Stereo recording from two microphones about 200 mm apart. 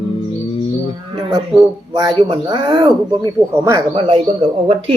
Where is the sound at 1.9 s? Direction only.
20° right (ahead or behind).